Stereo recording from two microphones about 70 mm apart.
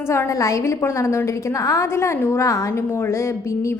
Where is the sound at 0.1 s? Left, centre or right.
Left.